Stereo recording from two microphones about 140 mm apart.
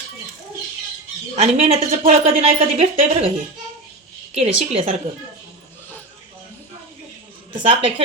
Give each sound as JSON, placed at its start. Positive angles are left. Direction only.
{"t": 1.4, "sound": "a woman's voice", "side_deg": -50}
{"t": 4.4, "sound": "a woman's voice", "side_deg": -45}
{"t": 7.6, "sound": "a woman's voice", "side_deg": -40}